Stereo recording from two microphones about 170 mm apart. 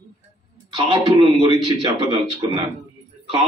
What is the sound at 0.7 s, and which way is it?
A man's voice, 25° right (ahead or behind).